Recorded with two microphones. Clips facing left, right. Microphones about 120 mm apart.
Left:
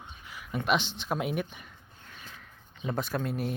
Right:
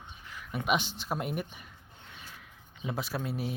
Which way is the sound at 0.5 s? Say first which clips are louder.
Left 2 dB; 10° right (ahead or behind).